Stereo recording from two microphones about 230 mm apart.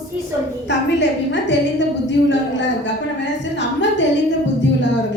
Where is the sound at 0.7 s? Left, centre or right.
Left.